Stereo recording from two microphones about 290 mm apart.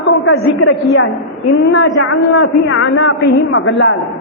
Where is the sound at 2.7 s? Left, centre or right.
Left.